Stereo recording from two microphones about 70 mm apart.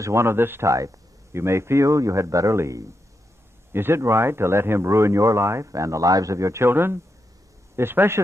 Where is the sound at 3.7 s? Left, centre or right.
Right.